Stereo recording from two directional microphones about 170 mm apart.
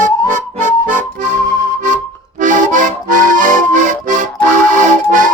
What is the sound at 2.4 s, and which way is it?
Accordion, 50° right (ahead or behind).